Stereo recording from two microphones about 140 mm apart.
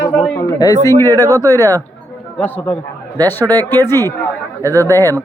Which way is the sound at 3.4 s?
25° right (ahead or behind).